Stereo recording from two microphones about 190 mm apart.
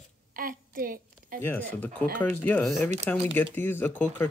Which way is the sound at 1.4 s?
10° left (ahead or behind).